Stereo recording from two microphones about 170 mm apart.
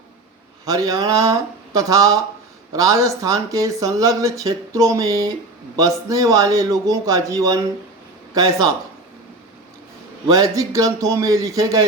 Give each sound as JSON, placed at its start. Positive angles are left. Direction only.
{"t": 0.6, "sound": "speech", "side_deg": -20}
{"t": 10.2, "sound": "speech", "side_deg": -20}